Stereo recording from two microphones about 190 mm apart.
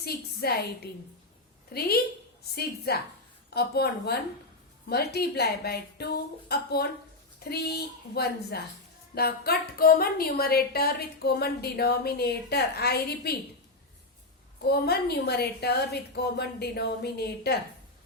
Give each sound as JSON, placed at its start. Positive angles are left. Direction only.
{"t": 0.0, "sound": "a woman's voice", "side_deg": 55}
{"t": 1.7, "sound": "a woman's voice", "side_deg": 55}
{"t": 14.6, "sound": "a woman's voice", "side_deg": 55}